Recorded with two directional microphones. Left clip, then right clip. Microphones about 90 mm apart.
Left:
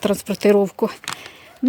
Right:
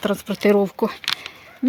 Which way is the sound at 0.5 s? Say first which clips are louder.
Left 1 dB; 35° left (ahead or behind).